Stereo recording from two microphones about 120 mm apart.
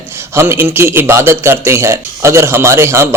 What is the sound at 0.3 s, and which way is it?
A man's voice, 20° right (ahead or behind).